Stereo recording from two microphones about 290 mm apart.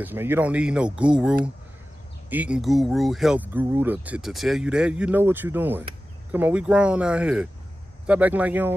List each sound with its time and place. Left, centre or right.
0.0 s speech: centre